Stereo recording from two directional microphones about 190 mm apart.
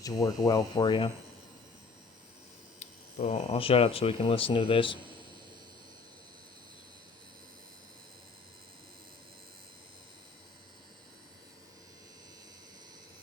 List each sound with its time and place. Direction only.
0.0 s speech: 20° left (ahead or behind)
2.7 s speech: 35° left (ahead or behind)